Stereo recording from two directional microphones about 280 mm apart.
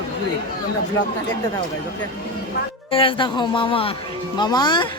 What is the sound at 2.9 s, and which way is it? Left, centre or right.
Speech, centre.